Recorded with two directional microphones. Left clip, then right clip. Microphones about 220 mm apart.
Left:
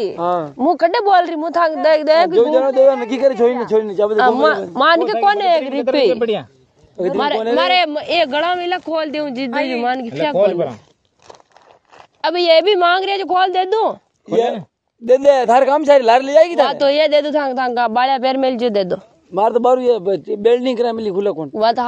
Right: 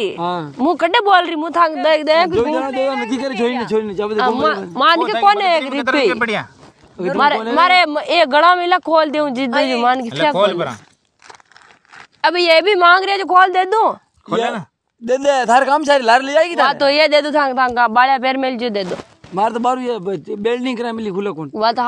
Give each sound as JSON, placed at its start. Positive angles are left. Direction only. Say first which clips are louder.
{"t": 0.2, "sound": "speech", "louder": "left 3 dB", "side_deg": -55}
{"t": 0.6, "sound": "speech", "louder": "right 1 dB", "side_deg": -25}
{"t": 2.4, "sound": "a man's voice", "louder": "left 6 dB", "side_deg": -45}
{"t": 4.2, "sound": "speech", "louder": "left 2 dB", "side_deg": -10}
{"t": 5.2, "sound": "speech", "louder": "right 1 dB", "side_deg": -25}
{"t": 7.2, "sound": "speech", "louder": "right 3 dB", "side_deg": -25}
{"t": 9.5, "sound": "speech", "louder": "right 2 dB", "side_deg": -65}
{"t": 9.8, "sound": "speech", "louder": "right 4 dB", "side_deg": -30}
{"t": 12.2, "sound": "speech", "louder": "even", "side_deg": -25}
{"t": 15.0, "sound": "speech", "louder": "left 3 dB", "side_deg": -40}
{"t": 16.6, "sound": "speech", "louder": "right 1 dB", "side_deg": -25}
{"t": 19.3, "sound": "speech", "louder": "left 3 dB", "side_deg": -45}
{"t": 21.5, "sound": "speech", "louder": "even", "side_deg": -20}